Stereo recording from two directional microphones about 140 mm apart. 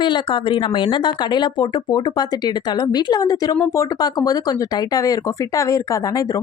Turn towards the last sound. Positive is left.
turn(degrees=25)  # may be behind; listen again after turning